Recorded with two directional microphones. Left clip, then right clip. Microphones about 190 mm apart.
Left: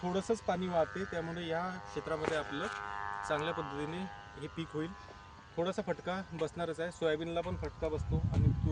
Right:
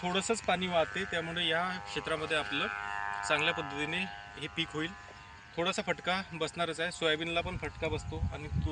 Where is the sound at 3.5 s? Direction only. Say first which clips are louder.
Right 4 dB; 40° right (ahead or behind).